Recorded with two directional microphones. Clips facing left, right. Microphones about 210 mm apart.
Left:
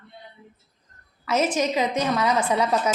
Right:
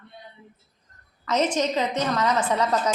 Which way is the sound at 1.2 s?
10° left (ahead or behind).